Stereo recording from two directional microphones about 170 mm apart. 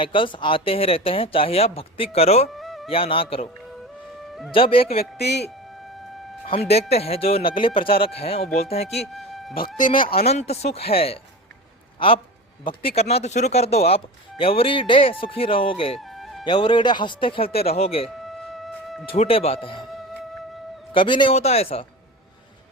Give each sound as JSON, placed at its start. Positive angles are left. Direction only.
{"t": 0.0, "sound": "speech", "side_deg": 30}
{"t": 2.5, "sound": "music", "side_deg": 0}
{"t": 2.9, "sound": "speech", "side_deg": 30}
{"t": 4.5, "sound": "speech", "side_deg": 30}
{"t": 4.9, "sound": "speech", "side_deg": 70}
{"t": 6.4, "sound": "speech", "side_deg": 40}
{"t": 9.1, "sound": "music", "side_deg": 0}
{"t": 10.2, "sound": "a man's voice", "side_deg": 40}
{"t": 16.0, "sound": "music", "side_deg": 0}
{"t": 16.4, "sound": "speech", "side_deg": 25}
{"t": 18.3, "sound": "music", "side_deg": 0}
{"t": 19.0, "sound": "speech", "side_deg": 35}
{"t": 20.9, "sound": "a man's voice", "side_deg": 30}
{"t": 21.3, "sound": "speech", "side_deg": 40}